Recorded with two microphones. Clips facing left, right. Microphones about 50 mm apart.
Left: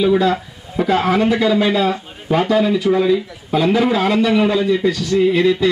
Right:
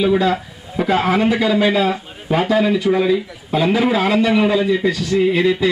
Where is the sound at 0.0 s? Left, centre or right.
Centre.